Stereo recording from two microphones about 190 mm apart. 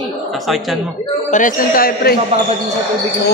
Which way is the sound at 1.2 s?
45° left (ahead or behind).